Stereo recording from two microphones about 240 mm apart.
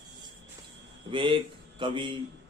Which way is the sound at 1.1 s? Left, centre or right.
Right.